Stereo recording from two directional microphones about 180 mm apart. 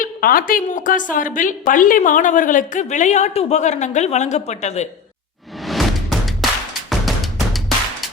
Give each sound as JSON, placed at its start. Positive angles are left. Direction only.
{"t": 0.0, "sound": "a woman's voice", "side_deg": 50}
{"t": 5.6, "sound": "music", "side_deg": 0}